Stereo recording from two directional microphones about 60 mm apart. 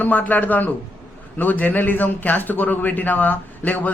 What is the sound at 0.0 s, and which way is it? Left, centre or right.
A man's voice, left.